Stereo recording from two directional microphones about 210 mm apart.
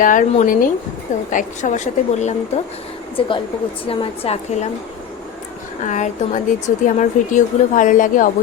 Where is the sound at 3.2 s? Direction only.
25° left (ahead or behind).